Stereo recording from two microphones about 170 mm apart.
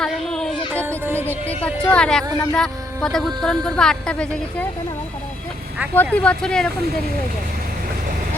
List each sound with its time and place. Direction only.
0.0 s a sound: 5° left (ahead or behind)
0.9 s music: 15° right (ahead or behind)
1.5 s speech: 5° left (ahead or behind)
5.9 s speech: 10° left (ahead or behind)